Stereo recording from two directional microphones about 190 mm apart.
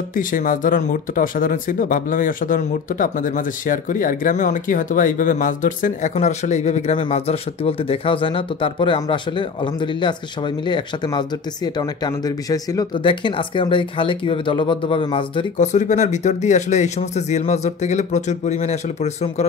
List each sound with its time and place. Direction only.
0.1 s speech: 45° left (ahead or behind); by 9.2 s 25° left (ahead or behind)
10.7 s speech: 20° left (ahead or behind)
15.5 s speech: 40° left (ahead or behind)